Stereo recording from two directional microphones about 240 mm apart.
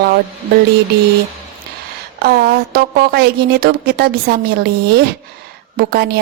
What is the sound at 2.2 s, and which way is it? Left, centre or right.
A woman's voice, right.